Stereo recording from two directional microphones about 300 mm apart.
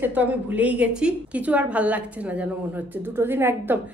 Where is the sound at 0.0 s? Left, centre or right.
Centre.